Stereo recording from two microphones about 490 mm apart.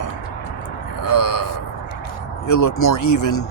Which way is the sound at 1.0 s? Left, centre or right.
Left.